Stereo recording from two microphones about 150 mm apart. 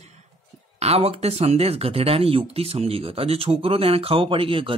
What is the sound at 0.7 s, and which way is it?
Speech, 45° right (ahead or behind).